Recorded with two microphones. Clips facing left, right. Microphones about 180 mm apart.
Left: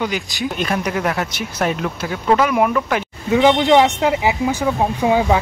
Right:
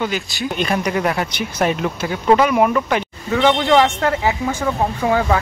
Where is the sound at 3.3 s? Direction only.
15° left (ahead or behind).